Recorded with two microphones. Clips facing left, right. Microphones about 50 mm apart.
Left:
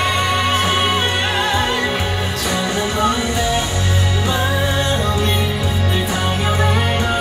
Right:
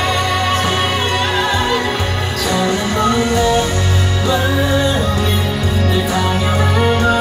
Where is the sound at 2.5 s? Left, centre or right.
Centre.